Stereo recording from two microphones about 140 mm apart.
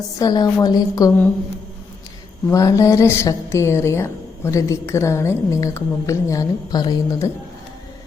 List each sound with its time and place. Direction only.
0.2 s a woman's voice: 25° left (ahead or behind)
2.5 s a woman's voice: 25° left (ahead or behind)